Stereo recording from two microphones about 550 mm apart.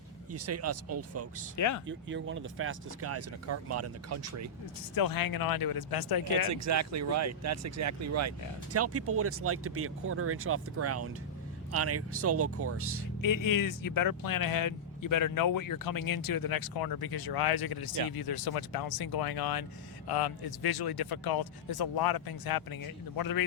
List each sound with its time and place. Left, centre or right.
0.3 s speech: right
1.5 s speech: left
1.9 s speech: centre
4.9 s speech: left
6.5 s speech: right
13.2 s speech: left